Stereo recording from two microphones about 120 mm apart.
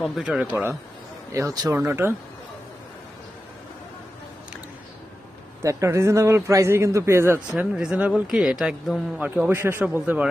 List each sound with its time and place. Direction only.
0.2 s a man's voice: 5° right (ahead or behind)
1.3 s a man's voice: 25° right (ahead or behind)
5.6 s a man's voice: 25° right (ahead or behind)
7.3 s a man's voice: 5° right (ahead or behind)